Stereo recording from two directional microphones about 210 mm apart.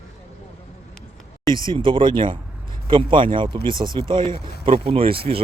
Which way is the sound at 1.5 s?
25° right (ahead or behind).